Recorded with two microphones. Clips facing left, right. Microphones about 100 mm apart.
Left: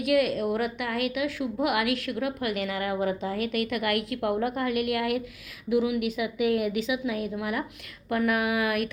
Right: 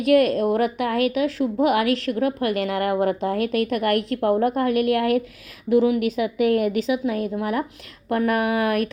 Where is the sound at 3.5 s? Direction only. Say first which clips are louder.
Right 5 dB; 45° right (ahead or behind).